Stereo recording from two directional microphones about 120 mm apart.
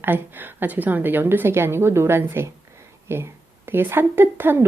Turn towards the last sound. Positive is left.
turn(degrees=-20)  # may be behind; listen again after turning